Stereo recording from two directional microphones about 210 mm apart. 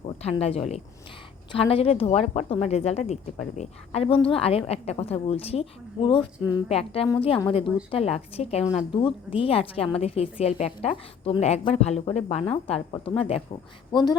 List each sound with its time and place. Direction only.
0.2 s speech: 30° left (ahead or behind)